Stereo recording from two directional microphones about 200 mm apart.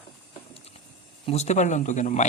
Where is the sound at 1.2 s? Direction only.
30° left (ahead or behind).